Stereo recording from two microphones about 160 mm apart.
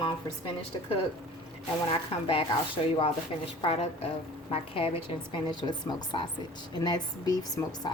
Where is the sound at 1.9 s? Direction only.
35° left (ahead or behind).